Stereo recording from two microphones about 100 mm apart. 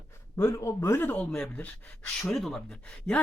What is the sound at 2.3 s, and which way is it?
Speech, 5° left (ahead or behind).